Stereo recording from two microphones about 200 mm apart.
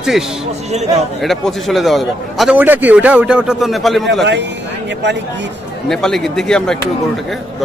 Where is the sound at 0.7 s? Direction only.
35° right (ahead or behind).